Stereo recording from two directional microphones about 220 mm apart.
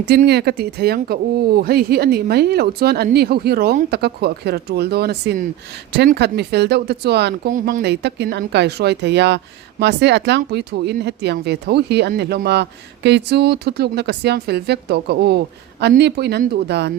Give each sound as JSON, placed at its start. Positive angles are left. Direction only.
{"t": 0.0, "sound": "speech", "side_deg": -45}